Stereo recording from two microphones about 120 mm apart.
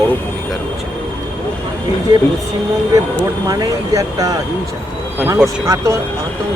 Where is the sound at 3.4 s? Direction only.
30° right (ahead or behind).